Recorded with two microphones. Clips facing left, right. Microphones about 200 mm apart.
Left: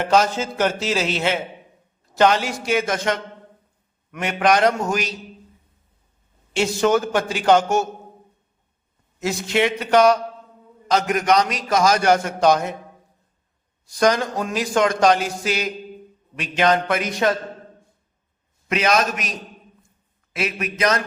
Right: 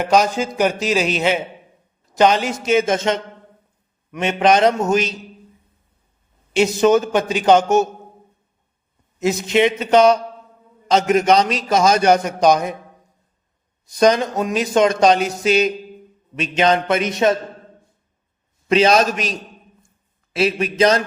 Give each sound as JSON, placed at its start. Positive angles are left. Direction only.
{"t": 0.0, "sound": "a man's voice", "side_deg": -15}
{"t": 6.5, "sound": "a man's voice", "side_deg": -20}
{"t": 9.1, "sound": "a man's voice", "side_deg": -20}
{"t": 13.8, "sound": "a man's voice", "side_deg": -20}
{"t": 18.7, "sound": "a man's voice", "side_deg": -30}
{"t": 20.3, "sound": "a man's voice", "side_deg": -30}